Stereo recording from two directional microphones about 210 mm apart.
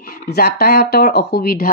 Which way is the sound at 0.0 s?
45° left (ahead or behind).